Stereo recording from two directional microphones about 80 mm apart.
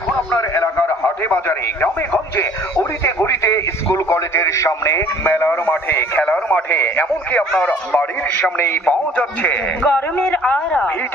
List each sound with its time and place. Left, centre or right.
0.5 s radio: left
5.2 s a man's voice: left